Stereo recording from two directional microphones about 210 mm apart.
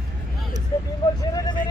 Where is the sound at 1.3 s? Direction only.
15° left (ahead or behind).